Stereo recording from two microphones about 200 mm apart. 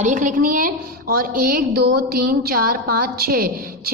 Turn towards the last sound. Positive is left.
turn(degrees=-50)  # may be behind; listen again after turning